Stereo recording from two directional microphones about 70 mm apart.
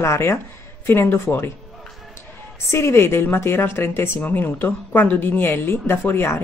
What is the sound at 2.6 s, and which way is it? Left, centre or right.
A woman's voice, left.